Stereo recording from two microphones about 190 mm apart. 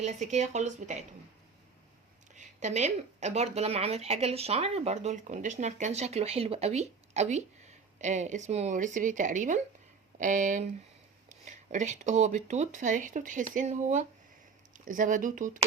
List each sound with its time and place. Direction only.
0.0 s speech: 35° right (ahead or behind)
2.3 s speech: 40° right (ahead or behind)